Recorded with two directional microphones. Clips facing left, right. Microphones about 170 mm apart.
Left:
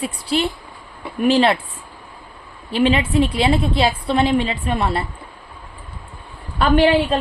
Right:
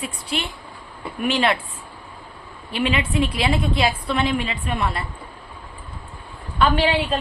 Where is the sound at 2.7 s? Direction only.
30° left (ahead or behind).